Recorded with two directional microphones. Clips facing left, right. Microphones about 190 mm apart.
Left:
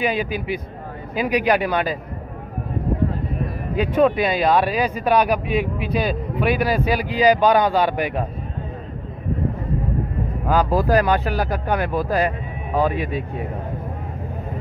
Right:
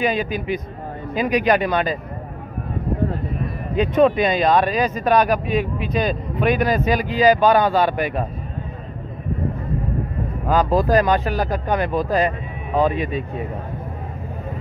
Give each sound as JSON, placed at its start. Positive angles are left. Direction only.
{"t": 0.0, "sound": "speech", "side_deg": 10}
{"t": 3.7, "sound": "speech", "side_deg": 10}
{"t": 11.0, "sound": "a man's voice", "side_deg": 10}